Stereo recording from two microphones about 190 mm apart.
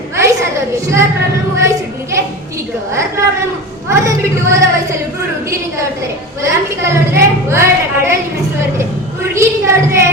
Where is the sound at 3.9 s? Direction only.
15° right (ahead or behind).